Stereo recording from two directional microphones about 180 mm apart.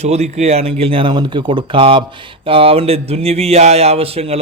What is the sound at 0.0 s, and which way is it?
A man's voice, 35° right (ahead or behind).